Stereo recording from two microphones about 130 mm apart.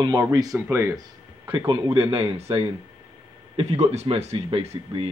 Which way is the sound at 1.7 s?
40° right (ahead or behind).